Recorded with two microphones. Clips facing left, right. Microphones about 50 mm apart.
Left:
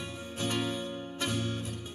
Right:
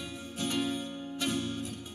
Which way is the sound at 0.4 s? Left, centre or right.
Left.